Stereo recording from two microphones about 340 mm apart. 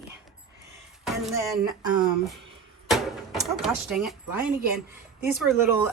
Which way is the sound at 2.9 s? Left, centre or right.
Centre.